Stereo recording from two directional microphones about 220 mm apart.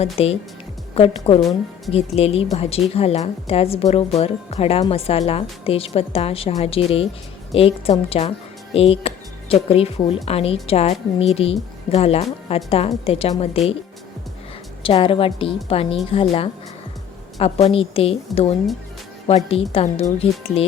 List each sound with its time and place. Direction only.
0.0 s speech: 25° left (ahead or behind)
14.8 s speech: 25° left (ahead or behind)